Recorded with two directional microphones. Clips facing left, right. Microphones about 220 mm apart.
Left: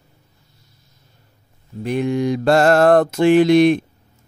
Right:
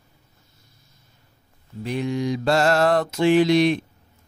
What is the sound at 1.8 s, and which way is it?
Mantra, 55° left (ahead or behind).